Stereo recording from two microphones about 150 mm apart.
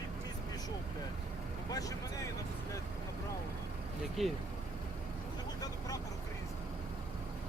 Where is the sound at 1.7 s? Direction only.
25° left (ahead or behind).